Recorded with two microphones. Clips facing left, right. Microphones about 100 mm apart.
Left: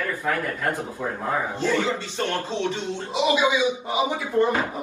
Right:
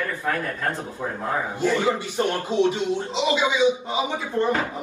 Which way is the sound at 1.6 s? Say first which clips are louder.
Right 5 dB; 20° right (ahead or behind).